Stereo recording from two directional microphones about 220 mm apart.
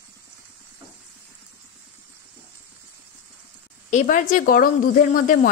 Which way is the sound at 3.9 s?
35° left (ahead or behind).